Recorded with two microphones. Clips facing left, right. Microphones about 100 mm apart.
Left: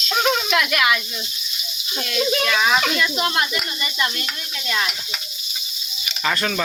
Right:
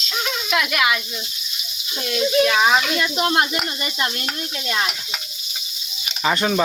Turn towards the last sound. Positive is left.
turn(degrees=-15)  # may be behind; listen again after turning